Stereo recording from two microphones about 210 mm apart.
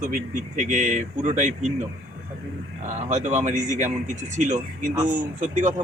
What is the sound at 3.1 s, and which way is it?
Speech, 35° right (ahead or behind).